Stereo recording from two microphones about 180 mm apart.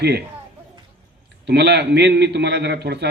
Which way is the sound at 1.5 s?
70° right (ahead or behind).